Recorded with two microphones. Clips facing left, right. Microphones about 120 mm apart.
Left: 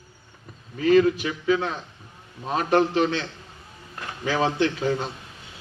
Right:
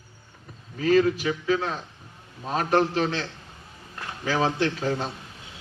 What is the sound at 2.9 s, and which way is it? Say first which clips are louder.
A man's voice: left 3 dB; 35° right (ahead or behind).